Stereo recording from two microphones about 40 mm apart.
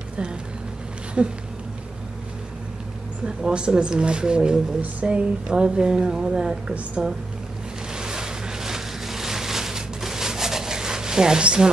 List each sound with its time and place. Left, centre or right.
1.2 s speech: right
3.4 s speech: right
7.9 s a sound: centre